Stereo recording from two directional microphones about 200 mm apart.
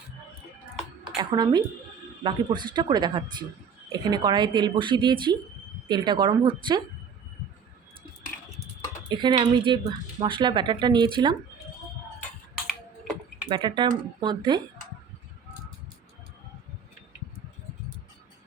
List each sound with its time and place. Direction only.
1.0 s speech: 25° right (ahead or behind)
9.0 s speech: 25° right (ahead or behind)
13.5 s speech: 25° right (ahead or behind)